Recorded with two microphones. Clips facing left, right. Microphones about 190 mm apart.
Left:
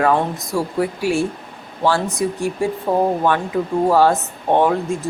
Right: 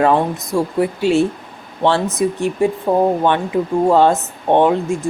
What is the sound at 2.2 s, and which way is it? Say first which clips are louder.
Speech: right 4 dB; 20° right (ahead or behind).